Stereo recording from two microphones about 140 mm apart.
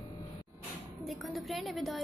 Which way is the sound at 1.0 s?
Centre (ahead or behind).